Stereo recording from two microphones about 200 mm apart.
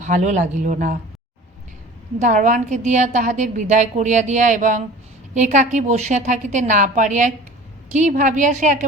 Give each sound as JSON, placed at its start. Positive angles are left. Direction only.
{"t": 0.0, "sound": "a woman's voice", "side_deg": -35}
{"t": 2.1, "sound": "a woman's voice", "side_deg": -40}